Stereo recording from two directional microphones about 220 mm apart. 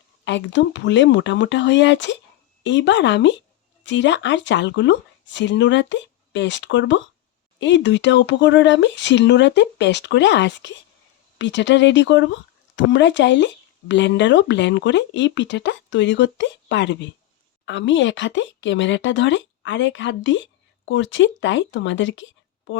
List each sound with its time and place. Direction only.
0.3 s speech: 55° left (ahead or behind)